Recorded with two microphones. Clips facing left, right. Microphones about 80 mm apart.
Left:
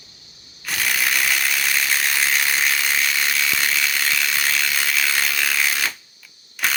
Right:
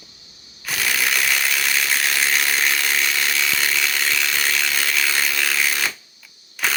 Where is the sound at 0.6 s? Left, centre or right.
Centre.